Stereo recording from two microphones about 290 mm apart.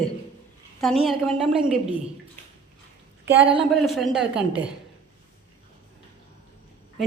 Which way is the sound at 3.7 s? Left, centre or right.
Centre.